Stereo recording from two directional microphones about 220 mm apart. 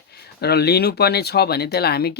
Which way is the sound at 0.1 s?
45° left (ahead or behind).